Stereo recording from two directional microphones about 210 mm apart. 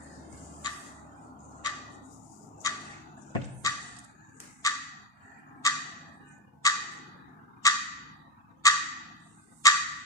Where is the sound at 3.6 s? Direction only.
15° left (ahead or behind).